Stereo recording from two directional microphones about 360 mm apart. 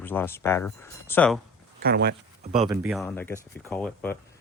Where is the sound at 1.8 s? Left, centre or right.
Right.